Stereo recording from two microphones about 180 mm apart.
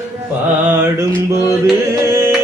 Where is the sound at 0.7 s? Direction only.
10° right (ahead or behind).